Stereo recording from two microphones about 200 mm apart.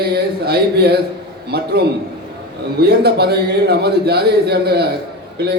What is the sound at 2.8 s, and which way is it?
A man's voice, 55° right (ahead or behind).